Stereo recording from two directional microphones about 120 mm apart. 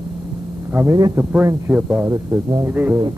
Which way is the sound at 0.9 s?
30° right (ahead or behind).